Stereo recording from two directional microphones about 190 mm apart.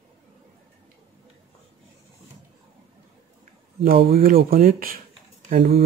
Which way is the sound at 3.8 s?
50° right (ahead or behind).